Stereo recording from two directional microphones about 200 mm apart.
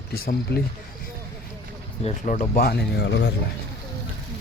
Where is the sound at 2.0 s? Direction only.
35° left (ahead or behind); by 3.3 s 60° left (ahead or behind).